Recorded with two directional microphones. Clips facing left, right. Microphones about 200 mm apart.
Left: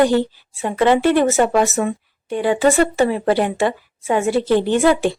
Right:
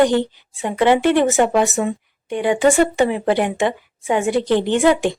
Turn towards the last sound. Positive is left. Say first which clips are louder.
# even
turn(degrees=-15)  # may be behind; listen again after turning